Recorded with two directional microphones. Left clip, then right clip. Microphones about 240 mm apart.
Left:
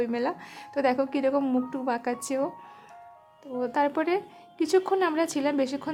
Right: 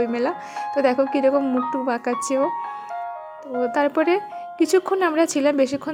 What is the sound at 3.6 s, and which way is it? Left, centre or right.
A woman's voice, centre.